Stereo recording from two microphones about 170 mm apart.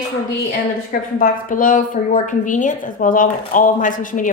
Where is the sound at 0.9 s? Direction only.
55° left (ahead or behind).